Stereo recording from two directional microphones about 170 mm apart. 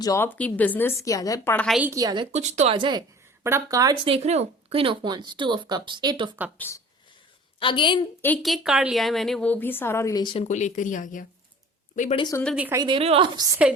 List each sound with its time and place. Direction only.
0.0 s speech: 15° left (ahead or behind)
1.5 s a woman's voice: centre (ahead or behind)
1.8 s speech: 20° right (ahead or behind)
2.3 s speech: 40° right (ahead or behind)
2.7 s speech: 30° right (ahead or behind)
3.4 s speech: 15° right (ahead or behind)
4.1 s speech: 40° right (ahead or behind)
6.6 s speech: 15° left (ahead or behind)
7.6 s a woman's voice: 30° left (ahead or behind)
8.4 s a woman's voice: centre (ahead or behind); by 10.4 s 25° left (ahead or behind)
10.4 s speech: 45° left (ahead or behind)
12.1 s a woman's voice: 25° left (ahead or behind)
12.5 s a woman's voice: 10° right (ahead or behind)
12.8 s speech: 30° right (ahead or behind)